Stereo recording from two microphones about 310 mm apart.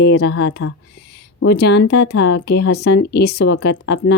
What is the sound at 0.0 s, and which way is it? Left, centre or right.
A woman's voice, left.